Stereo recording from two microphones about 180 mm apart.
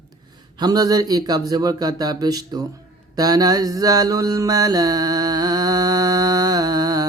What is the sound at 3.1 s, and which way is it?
Mantra, 20° right (ahead or behind).